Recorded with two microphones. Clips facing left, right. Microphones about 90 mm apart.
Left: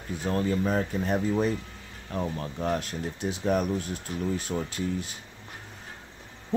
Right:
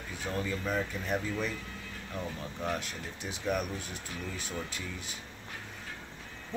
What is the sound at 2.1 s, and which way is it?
Speech, 45° left (ahead or behind).